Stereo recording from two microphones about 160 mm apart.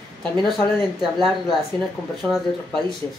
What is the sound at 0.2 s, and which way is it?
Speech, centre (ahead or behind).